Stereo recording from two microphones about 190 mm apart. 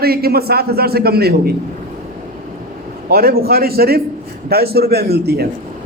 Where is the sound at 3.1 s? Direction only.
55° right (ahead or behind).